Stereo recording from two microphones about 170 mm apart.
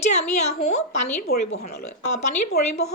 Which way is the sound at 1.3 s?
65° left (ahead or behind).